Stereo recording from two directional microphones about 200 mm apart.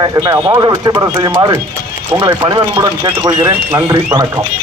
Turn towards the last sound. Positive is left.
turn(degrees=-20)  # may be behind; listen again after turning